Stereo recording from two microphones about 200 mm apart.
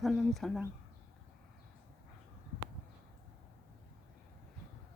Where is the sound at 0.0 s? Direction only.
Centre (ahead or behind).